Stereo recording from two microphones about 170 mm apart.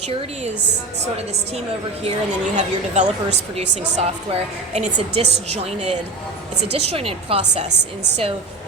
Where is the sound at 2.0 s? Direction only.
40° right (ahead or behind).